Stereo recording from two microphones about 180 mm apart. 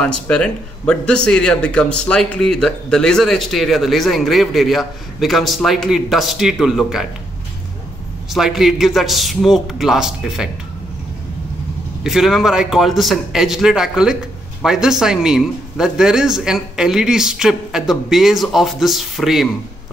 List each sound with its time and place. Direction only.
0.0 s speech: 5° left (ahead or behind)
8.3 s speech: centre (ahead or behind)
12.0 s speech: centre (ahead or behind)